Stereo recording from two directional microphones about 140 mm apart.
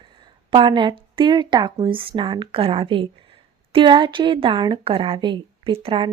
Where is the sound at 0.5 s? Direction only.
35° right (ahead or behind).